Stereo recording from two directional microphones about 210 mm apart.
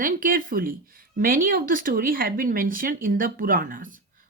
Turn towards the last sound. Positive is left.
turn(degrees=-40)  # may be behind; listen again after turning